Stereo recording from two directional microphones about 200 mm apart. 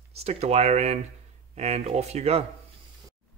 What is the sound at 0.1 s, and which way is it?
Speech, 30° right (ahead or behind).